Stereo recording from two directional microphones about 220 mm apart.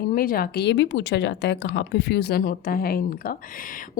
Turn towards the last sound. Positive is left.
turn(degrees=40)  # may be behind; listen again after turning